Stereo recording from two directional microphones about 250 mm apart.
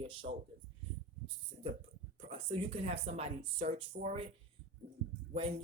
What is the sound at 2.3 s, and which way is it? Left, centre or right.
Speech, right.